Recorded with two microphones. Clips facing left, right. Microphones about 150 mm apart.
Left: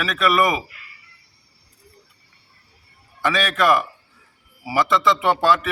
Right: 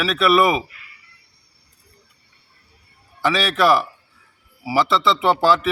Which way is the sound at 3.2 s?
5° right (ahead or behind).